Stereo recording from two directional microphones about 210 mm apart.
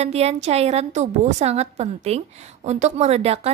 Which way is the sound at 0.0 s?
30° right (ahead or behind).